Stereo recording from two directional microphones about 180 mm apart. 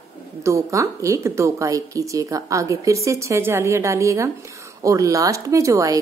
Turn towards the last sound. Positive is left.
turn(degrees=-15)  # may be behind; listen again after turning